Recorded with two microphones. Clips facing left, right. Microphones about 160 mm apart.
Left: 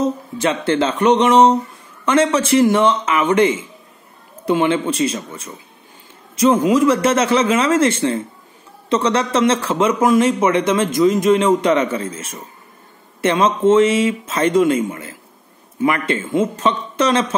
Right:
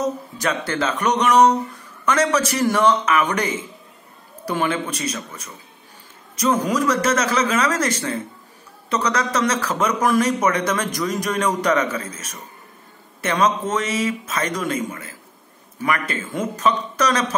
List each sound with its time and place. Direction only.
0.0 s a man's voice: 25° left (ahead or behind)